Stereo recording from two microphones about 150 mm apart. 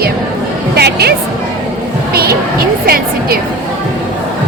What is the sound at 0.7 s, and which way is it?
A woman's voice, 90° right.